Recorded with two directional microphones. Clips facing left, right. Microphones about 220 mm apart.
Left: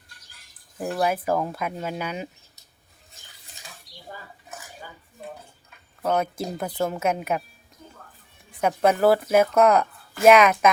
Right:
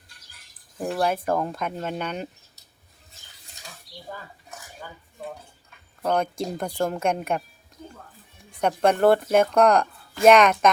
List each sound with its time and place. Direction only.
0.9 s speech: 5° left (ahead or behind)
6.0 s speech: 5° left (ahead or behind)
8.6 s speech: 5° left (ahead or behind)